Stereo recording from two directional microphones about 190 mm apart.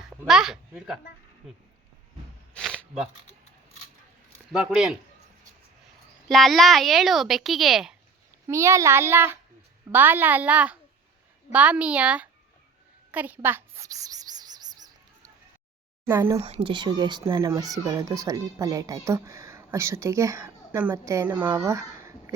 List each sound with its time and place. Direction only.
0.1 s a child's voice: 5° right (ahead or behind)
2.5 s a sound: centre (ahead or behind)
2.7 s bleat: 5° right (ahead or behind)
4.5 s speech: 5° right (ahead or behind)
6.2 s speech: centre (ahead or behind)
8.4 s speech: 15° right (ahead or behind)
13.1 s a sound: 10° right (ahead or behind)
16.0 s speech: 10° right (ahead or behind)
16.5 s speech: 30° right (ahead or behind); by 22.4 s 15° right (ahead or behind)